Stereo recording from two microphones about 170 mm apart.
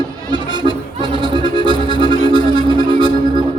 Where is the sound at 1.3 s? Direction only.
30° right (ahead or behind).